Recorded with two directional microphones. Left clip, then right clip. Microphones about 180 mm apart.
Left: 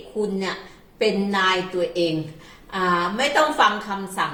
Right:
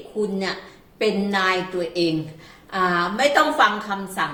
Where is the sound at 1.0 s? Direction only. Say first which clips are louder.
Even; 15° right (ahead or behind).